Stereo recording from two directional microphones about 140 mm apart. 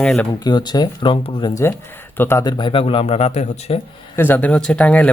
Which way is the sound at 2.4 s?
30° left (ahead or behind).